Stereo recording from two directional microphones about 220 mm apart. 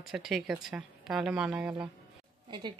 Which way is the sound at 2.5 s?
20° right (ahead or behind).